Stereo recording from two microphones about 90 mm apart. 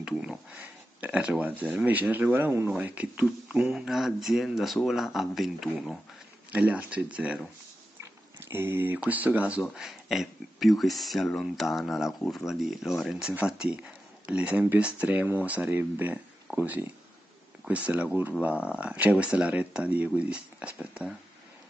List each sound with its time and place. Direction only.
0.0 s speech: 10° right (ahead or behind)
0.5 s speech: 20° right (ahead or behind)
3.7 s speech: 5° right (ahead or behind)
6.5 s speech: 15° right (ahead or behind)
8.0 s speech: 25° right (ahead or behind)
9.6 s speech: 5° right (ahead or behind)